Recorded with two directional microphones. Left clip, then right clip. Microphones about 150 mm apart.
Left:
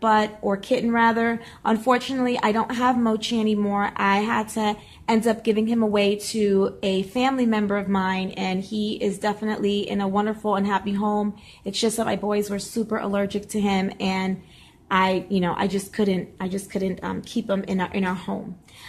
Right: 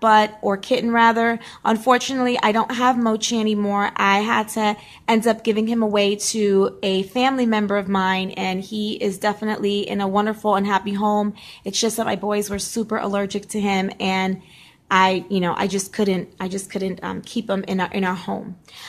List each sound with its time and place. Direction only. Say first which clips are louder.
0.0 s speech: right 5 dB; 20° right (ahead or behind)